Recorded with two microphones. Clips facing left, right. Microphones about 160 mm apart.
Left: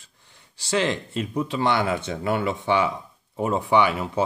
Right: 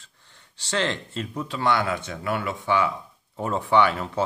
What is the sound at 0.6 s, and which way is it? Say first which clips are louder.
Speech: left 3 dB; 10° left (ahead or behind).